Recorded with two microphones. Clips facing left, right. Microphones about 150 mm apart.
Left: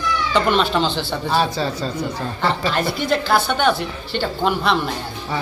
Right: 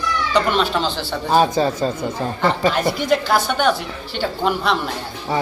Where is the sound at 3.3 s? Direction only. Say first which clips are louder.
Even; 10° right (ahead or behind).